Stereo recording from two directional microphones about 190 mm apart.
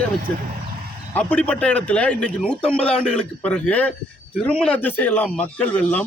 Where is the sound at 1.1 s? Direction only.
10° left (ahead or behind).